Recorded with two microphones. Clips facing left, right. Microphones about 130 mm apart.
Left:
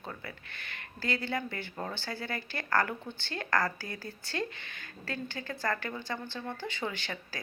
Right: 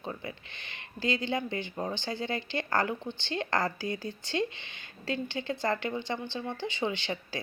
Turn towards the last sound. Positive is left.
turn(degrees=-20)  # may be behind; listen again after turning